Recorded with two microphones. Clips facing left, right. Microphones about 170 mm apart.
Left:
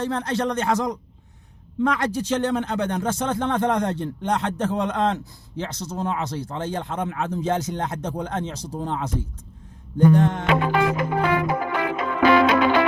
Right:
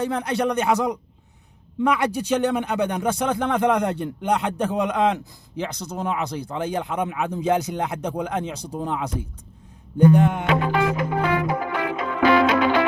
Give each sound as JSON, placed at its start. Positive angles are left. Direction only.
{"t": 0.0, "sound": "speech", "side_deg": -15}
{"t": 10.7, "sound": "music", "side_deg": 50}